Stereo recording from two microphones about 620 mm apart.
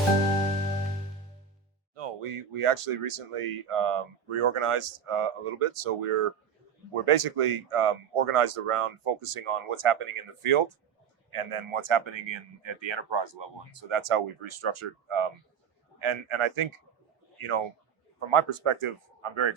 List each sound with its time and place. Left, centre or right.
2.0 s speech: right
13.9 s speech: right